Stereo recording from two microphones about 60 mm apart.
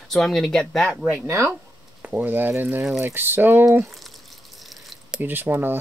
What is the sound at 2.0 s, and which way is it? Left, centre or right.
Speech, right.